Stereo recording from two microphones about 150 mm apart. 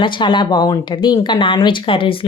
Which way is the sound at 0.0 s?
30° left (ahead or behind).